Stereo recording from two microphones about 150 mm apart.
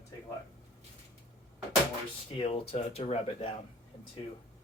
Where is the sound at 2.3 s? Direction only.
40° left (ahead or behind).